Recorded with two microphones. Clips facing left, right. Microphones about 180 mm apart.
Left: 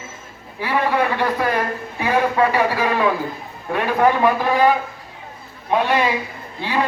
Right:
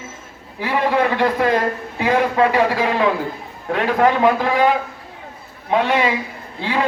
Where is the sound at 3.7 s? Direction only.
20° right (ahead or behind).